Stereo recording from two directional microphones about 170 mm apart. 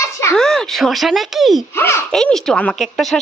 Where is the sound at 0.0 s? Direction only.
15° left (ahead or behind).